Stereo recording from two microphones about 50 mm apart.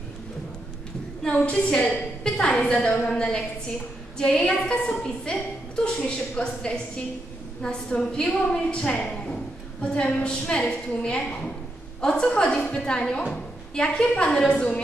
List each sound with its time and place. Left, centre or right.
1.2 s a woman's voice: left
8.9 s a sound: left
10.2 s a woman's voice: centre